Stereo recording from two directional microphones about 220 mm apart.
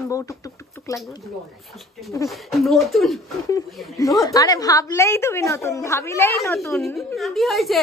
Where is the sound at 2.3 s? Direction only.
Centre (ahead or behind).